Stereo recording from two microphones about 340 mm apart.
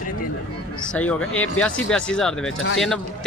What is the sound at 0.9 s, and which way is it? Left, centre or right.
Speech, centre.